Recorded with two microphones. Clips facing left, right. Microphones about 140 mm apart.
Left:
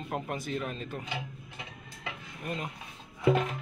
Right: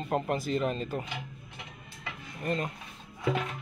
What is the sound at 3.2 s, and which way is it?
Music, 10° left (ahead or behind).